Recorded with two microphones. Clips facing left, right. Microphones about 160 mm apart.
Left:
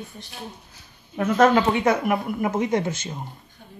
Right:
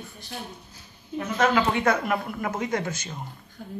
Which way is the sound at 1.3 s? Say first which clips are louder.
Left 5 dB; 45° left (ahead or behind).